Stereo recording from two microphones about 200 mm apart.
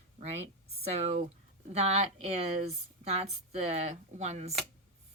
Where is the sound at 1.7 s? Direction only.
35° right (ahead or behind).